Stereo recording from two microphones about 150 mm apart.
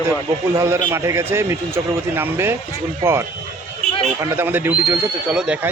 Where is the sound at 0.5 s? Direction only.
20° right (ahead or behind).